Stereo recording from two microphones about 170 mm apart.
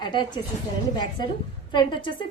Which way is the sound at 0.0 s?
25° left (ahead or behind).